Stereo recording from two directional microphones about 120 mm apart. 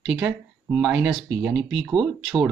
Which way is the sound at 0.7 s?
5° right (ahead or behind).